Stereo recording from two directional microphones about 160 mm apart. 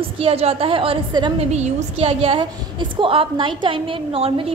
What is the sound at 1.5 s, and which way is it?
A woman's voice, 40° right (ahead or behind).